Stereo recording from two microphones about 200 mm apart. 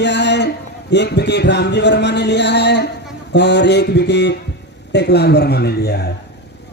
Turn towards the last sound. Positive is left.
turn(degrees=55)  # may be behind; listen again after turning